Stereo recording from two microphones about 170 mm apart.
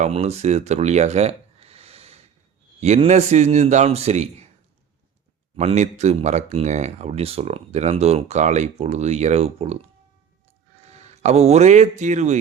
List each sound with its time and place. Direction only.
0.0 s speech: 40° right (ahead or behind)
5.5 s speech: 40° right (ahead or behind)
10.8 s speech: 40° right (ahead or behind)